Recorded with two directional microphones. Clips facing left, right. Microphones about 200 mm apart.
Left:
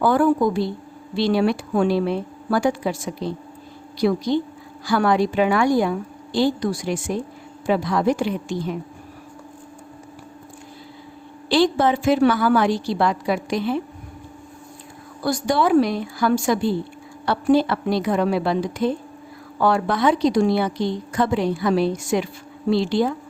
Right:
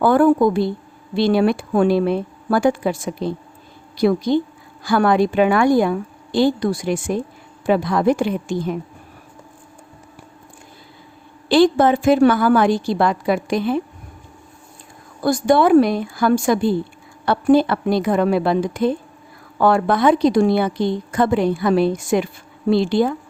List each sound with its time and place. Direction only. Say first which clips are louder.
0.0 s a woman's voice: right 4 dB; 55° right (ahead or behind)
11.4 s a woman's voice: right 4 dB; 50° right (ahead or behind)
15.2 s a woman's voice: right 5 dB; 55° right (ahead or behind)